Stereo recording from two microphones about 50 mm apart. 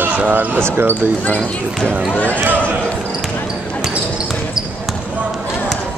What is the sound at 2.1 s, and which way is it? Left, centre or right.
Speech, left.